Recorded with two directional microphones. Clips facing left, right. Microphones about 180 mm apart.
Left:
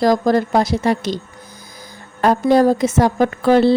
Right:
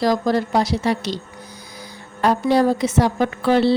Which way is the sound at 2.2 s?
45° left (ahead or behind).